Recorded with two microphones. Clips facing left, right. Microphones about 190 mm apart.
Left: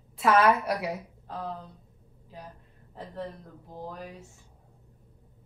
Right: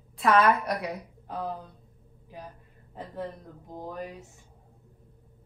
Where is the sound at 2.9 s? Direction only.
15° right (ahead or behind).